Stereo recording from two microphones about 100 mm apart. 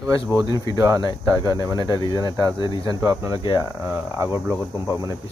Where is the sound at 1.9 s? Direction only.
40° left (ahead or behind).